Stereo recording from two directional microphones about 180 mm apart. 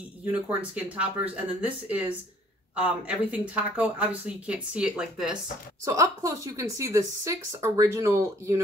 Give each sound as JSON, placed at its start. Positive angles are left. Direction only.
{"t": 0.2, "sound": "a woman's voice", "side_deg": -10}
{"t": 5.9, "sound": "a woman's voice", "side_deg": -15}